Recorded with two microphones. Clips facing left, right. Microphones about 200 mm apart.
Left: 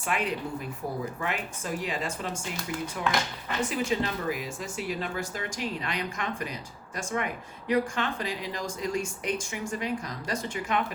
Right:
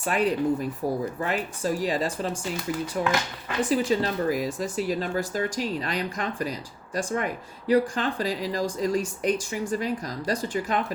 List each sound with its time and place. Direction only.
0.0 s speech: 40° right (ahead or behind)